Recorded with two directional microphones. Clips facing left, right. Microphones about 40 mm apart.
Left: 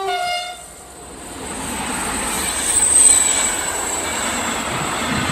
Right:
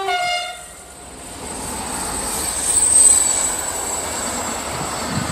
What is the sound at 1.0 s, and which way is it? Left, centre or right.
Train, left.